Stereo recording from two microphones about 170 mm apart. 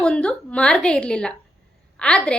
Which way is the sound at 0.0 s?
5° left (ahead or behind).